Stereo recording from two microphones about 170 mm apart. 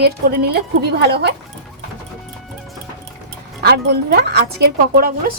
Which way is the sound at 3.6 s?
70° right (ahead or behind).